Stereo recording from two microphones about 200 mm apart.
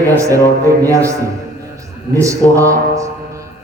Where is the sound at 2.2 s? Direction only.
15° right (ahead or behind).